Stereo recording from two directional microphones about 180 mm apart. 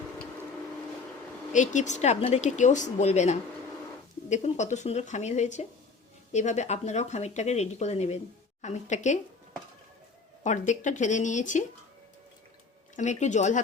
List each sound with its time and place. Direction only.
1.5 s speech: 40° left (ahead or behind)
10.4 s speech: 40° left (ahead or behind)
13.0 s speech: 40° left (ahead or behind)